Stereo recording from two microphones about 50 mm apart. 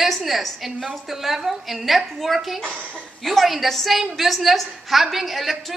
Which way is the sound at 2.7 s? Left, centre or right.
Right.